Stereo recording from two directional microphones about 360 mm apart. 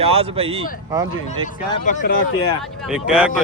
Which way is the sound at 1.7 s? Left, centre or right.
Left.